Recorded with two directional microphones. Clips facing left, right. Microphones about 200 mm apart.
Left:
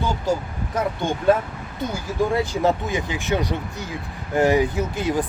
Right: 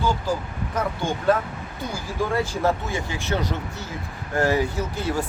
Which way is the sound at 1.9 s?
20° left (ahead or behind).